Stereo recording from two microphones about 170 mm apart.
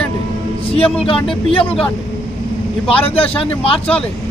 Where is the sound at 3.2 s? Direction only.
35° left (ahead or behind).